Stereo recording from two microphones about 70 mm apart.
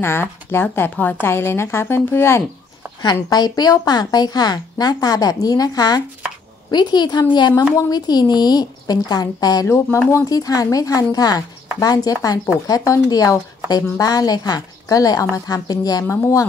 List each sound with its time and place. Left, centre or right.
0.0 s speech: left
3.3 s a woman's voice: left
6.7 s a woman's voice: left
7.7 s a woman's voice: left
9.7 s speech: left
10.3 s a woman's voice: left
16.1 s speech: left